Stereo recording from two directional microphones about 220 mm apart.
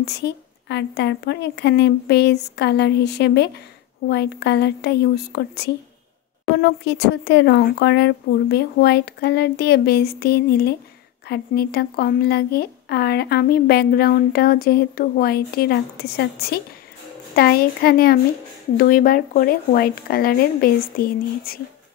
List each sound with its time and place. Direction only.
0.0 s speech: 50° left (ahead or behind)